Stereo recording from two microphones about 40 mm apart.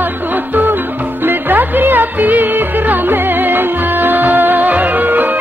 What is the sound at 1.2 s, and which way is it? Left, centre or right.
Music, right.